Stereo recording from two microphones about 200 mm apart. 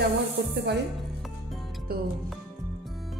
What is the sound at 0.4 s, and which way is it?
Speech, 55° right (ahead or behind).